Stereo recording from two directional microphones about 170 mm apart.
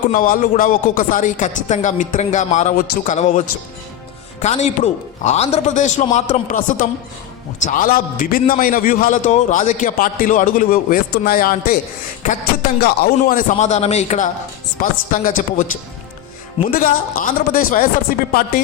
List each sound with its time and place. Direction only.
0.1 s speech: 55° left (ahead or behind)
2.7 s a man's voice: 60° left (ahead or behind)
3.2 s a man's voice: 50° left (ahead or behind)
12.8 s speech: 60° left (ahead or behind); by 14.3 s 40° left (ahead or behind)
14.8 s speech: 55° left (ahead or behind)
16.7 s a man's voice: 55° left (ahead or behind)